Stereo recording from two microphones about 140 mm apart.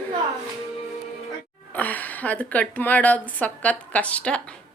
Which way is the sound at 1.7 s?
10° left (ahead or behind).